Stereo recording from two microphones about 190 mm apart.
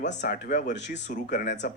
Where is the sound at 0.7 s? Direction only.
70° left (ahead or behind).